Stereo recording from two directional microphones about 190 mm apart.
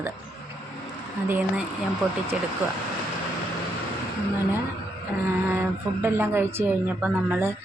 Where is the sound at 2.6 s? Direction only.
10° right (ahead or behind).